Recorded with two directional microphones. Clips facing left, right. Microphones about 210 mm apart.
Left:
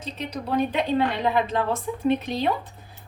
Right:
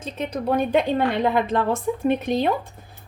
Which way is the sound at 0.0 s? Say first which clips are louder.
Right 5 dB; 50° right (ahead or behind).